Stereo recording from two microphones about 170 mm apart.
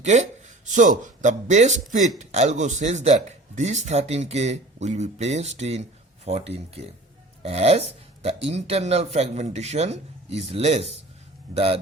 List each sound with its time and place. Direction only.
0.0 s speech: 45° right (ahead or behind)